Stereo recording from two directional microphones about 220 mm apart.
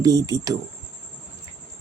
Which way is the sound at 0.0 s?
15° right (ahead or behind).